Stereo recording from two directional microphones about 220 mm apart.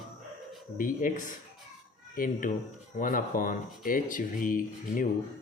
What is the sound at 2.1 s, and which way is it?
Speech, 40° left (ahead or behind).